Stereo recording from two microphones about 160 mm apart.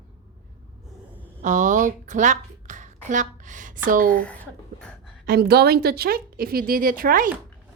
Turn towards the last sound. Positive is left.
turn(degrees=-60)  # may be behind; listen again after turning